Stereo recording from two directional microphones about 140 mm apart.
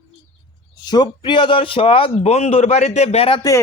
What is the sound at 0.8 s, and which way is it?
A man's voice, 30° left (ahead or behind).